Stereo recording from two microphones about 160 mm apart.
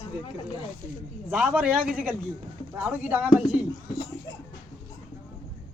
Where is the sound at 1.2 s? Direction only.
5° right (ahead or behind).